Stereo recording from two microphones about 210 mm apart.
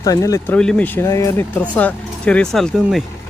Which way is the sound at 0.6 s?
5° left (ahead or behind).